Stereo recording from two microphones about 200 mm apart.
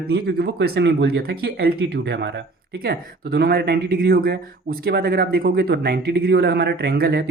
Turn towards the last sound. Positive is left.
turn(degrees=-55)  # may be behind; listen again after turning